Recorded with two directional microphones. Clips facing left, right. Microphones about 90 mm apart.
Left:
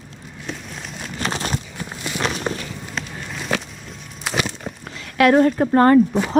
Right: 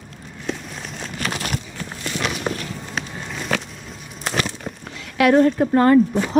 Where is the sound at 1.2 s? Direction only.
30° left (ahead or behind).